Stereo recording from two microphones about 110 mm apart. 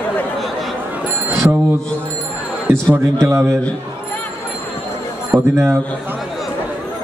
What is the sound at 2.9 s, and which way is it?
Speech, 25° right (ahead or behind).